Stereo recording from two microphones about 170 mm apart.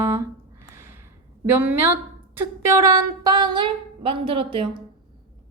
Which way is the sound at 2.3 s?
15° right (ahead or behind).